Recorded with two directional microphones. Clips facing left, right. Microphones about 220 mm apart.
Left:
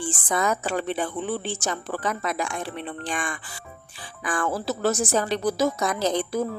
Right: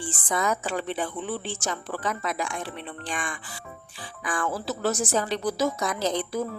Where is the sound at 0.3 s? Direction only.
50° left (ahead or behind).